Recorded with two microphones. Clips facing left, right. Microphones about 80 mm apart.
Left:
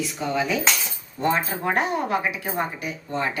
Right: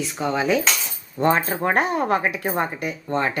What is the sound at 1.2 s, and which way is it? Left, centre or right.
Speech, right.